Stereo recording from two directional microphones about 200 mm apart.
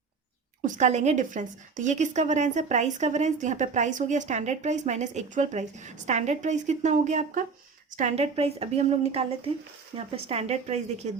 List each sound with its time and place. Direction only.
0.6 s a woman's voice: 40° right (ahead or behind)